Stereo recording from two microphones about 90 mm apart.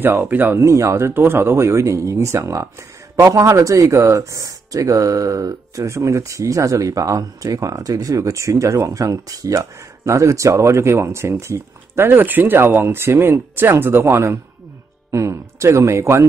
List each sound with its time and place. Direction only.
0.0 s speech: 20° right (ahead or behind)